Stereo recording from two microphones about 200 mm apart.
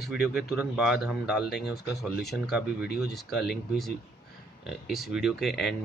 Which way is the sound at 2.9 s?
50° left (ahead or behind).